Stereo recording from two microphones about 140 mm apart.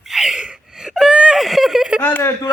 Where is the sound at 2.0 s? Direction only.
15° left (ahead or behind).